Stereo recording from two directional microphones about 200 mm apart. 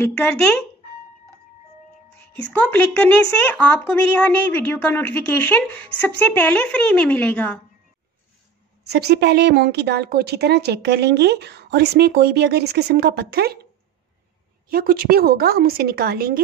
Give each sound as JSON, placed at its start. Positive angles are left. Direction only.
{"t": 0.0, "sound": "speech", "side_deg": 10}
{"t": 2.1, "sound": "speech", "side_deg": 10}
{"t": 8.8, "sound": "a woman's voice", "side_deg": -55}
{"t": 14.7, "sound": "a woman's voice", "side_deg": -45}